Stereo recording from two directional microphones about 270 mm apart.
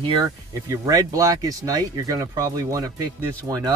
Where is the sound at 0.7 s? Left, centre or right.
Centre.